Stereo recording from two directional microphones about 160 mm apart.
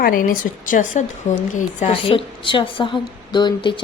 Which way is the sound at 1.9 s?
35° left (ahead or behind).